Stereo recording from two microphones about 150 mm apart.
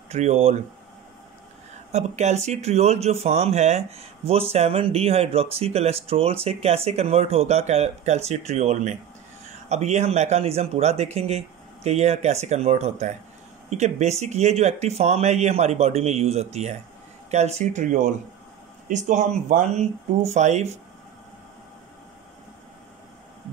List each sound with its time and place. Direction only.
0.1 s speech: 50° right (ahead or behind)
1.9 s speech: 50° right (ahead or behind)